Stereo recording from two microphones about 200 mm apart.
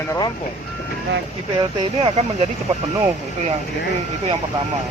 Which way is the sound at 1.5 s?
25° right (ahead or behind).